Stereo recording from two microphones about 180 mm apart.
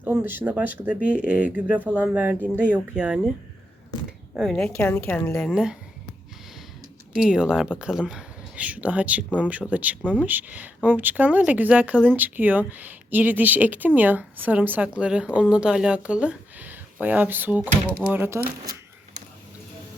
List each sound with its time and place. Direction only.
0.0 s speech: 5° right (ahead or behind)
4.4 s speech: centre (ahead or behind)
4.6 s speech: 10° left (ahead or behind)
7.1 s speech: 5° right (ahead or behind)